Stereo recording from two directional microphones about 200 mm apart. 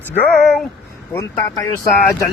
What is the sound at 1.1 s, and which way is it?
Speech, 15° left (ahead or behind).